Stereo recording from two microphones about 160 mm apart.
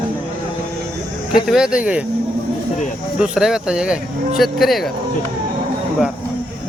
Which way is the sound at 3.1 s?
5° right (ahead or behind).